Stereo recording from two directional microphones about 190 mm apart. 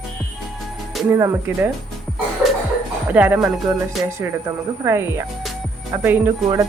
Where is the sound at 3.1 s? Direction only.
5° right (ahead or behind).